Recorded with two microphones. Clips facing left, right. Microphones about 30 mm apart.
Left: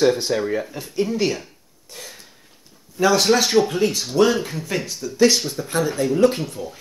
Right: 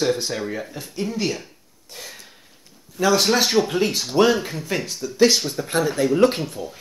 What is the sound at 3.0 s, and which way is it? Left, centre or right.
Speech, centre.